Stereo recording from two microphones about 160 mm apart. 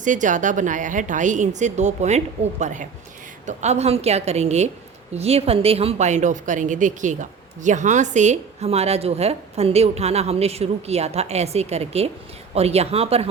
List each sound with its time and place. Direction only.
0.0 s a woman's voice: 50° right (ahead or behind)